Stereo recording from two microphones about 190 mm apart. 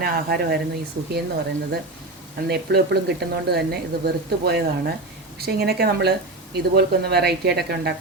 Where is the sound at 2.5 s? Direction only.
60° right (ahead or behind).